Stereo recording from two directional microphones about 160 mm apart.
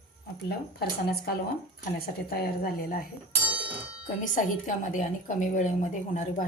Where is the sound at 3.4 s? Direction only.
10° right (ahead or behind).